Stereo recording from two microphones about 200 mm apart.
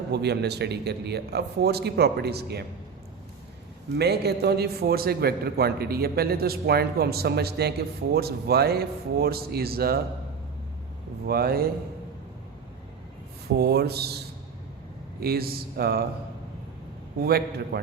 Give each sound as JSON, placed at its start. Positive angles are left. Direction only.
{"t": 0.1, "sound": "a man's voice", "side_deg": -55}
{"t": 3.9, "sound": "a man's voice", "side_deg": -55}
{"t": 11.3, "sound": "a man's voice", "side_deg": -50}
{"t": 13.6, "sound": "a man's voice", "side_deg": -55}
{"t": 15.2, "sound": "a man's voice", "side_deg": -50}
{"t": 17.2, "sound": "a man's voice", "side_deg": -50}